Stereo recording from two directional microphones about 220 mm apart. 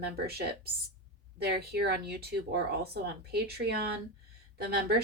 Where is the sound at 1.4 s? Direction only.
45° right (ahead or behind).